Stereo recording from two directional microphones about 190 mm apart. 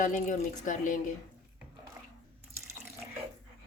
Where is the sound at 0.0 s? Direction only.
40° left (ahead or behind).